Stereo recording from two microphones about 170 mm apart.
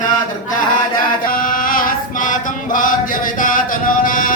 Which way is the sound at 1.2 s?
55° left (ahead or behind).